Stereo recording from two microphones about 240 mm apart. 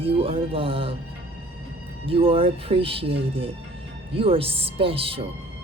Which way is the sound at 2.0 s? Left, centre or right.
Right.